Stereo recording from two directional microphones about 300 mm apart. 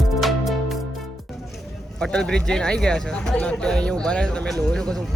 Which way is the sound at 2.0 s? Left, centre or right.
Centre.